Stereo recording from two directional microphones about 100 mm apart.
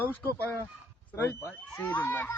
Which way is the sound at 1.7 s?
20° left (ahead or behind).